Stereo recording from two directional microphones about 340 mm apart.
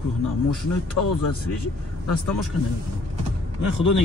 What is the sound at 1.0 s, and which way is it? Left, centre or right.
Speech, left.